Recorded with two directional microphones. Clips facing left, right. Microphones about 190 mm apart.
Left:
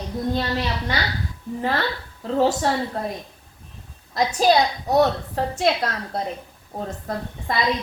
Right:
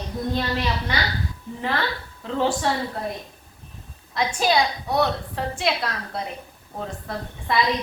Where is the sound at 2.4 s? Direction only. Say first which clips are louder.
Left 3 dB; 40° left (ahead or behind).